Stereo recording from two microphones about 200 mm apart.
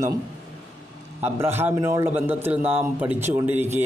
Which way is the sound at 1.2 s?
10° right (ahead or behind).